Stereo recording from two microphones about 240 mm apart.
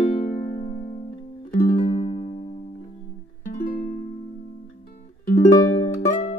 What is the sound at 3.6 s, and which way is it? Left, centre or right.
Music, left.